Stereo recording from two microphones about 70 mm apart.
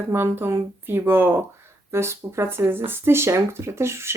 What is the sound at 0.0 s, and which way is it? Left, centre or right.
Speech, right.